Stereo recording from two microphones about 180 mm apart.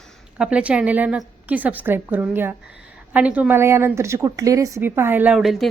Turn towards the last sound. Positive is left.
turn(degrees=0)  # may be behind; listen again after turning